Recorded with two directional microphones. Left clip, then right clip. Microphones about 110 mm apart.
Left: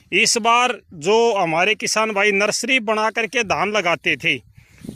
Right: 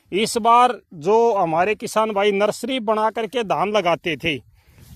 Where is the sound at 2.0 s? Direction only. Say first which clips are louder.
Right 1 dB; 15° right (ahead or behind).